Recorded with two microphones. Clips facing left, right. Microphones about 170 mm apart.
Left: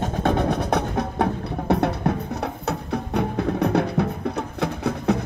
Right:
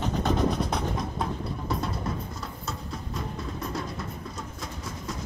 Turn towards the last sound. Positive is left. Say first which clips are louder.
# left 14 dB
turn(degrees=65)  # may be behind; listen again after turning